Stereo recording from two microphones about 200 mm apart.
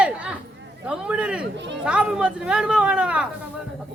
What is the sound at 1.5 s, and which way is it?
Speech, 60° right (ahead or behind).